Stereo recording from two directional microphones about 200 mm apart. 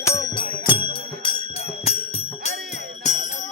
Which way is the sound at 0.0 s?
15° left (ahead or behind).